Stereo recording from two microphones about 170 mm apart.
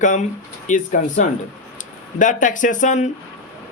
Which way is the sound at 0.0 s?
50° left (ahead or behind).